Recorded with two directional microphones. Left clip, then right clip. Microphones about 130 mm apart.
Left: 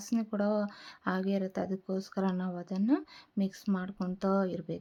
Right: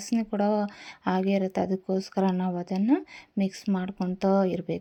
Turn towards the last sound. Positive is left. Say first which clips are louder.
# right 7 dB
turn(degrees=-20)  # may be behind; listen again after turning